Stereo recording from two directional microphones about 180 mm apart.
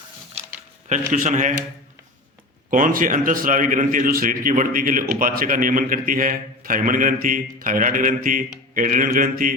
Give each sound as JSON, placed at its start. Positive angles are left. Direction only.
{"t": 0.9, "sound": "a man's voice", "side_deg": -45}
{"t": 2.6, "sound": "a man's voice", "side_deg": -50}